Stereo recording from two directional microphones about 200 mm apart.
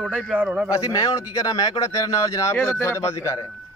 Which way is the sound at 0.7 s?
15° left (ahead or behind).